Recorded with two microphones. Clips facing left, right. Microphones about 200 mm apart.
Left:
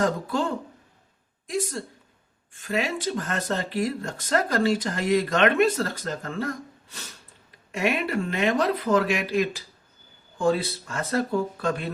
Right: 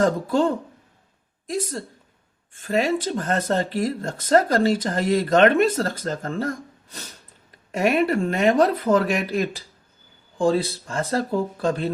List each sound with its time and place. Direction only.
0.0 s speech: 40° right (ahead or behind)
2.6 s speech: 40° right (ahead or behind)
7.7 s speech: 40° right (ahead or behind)